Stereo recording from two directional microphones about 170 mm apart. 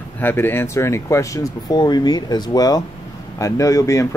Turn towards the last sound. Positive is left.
turn(degrees=20)  # may be behind; listen again after turning